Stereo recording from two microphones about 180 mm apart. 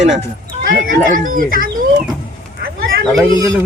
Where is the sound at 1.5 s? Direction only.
50° right (ahead or behind).